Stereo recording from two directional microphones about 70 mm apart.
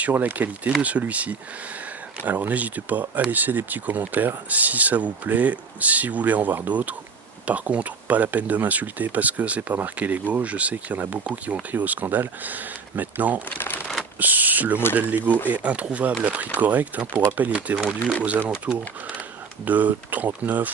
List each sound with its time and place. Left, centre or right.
0.1 s speech: right